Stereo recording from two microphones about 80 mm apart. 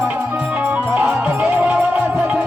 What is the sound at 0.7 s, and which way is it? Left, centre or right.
Music, centre.